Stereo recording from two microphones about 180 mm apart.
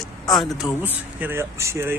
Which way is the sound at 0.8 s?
10° right (ahead or behind).